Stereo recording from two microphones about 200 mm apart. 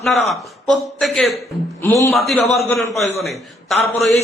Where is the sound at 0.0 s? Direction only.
Centre (ahead or behind).